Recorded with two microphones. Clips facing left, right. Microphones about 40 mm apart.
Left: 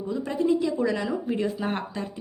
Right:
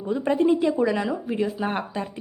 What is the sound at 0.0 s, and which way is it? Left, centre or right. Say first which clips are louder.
Speech: right 5 dB; right.